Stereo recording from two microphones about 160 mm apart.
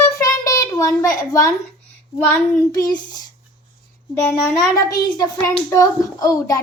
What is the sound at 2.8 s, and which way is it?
Speech, 25° left (ahead or behind).